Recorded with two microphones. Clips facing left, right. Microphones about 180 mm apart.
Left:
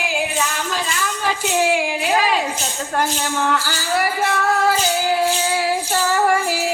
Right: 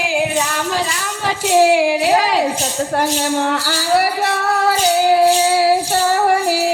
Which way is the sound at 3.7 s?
35° right (ahead or behind).